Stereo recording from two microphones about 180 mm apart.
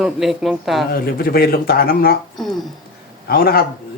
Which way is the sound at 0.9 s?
55° left (ahead or behind).